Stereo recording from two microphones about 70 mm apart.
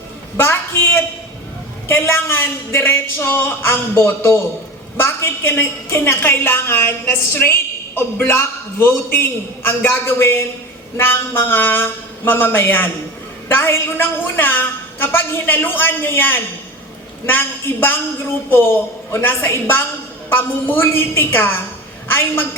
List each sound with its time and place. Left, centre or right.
0.3 s a woman's voice: left